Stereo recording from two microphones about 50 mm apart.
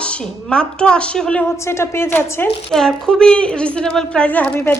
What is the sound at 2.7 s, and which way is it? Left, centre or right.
A woman's voice, centre.